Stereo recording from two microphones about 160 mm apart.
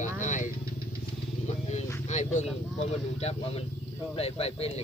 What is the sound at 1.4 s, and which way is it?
Vehicle, 45° left (ahead or behind).